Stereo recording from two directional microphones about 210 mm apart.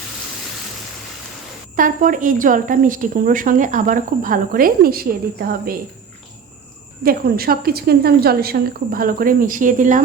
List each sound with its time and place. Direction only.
1.7 s speech: 40° right (ahead or behind)
7.0 s a woman's voice: 45° right (ahead or behind)